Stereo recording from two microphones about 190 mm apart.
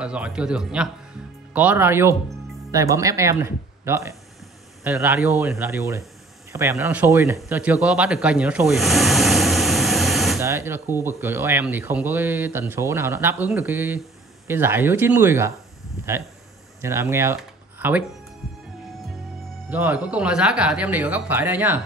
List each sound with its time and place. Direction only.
0.0 s a man's voice: 5° right (ahead or behind)
10.4 s speech: 15° right (ahead or behind)
16.8 s speech: 15° right (ahead or behind)
17.4 s a sound: 10° right (ahead or behind)
19.7 s speech: 10° right (ahead or behind)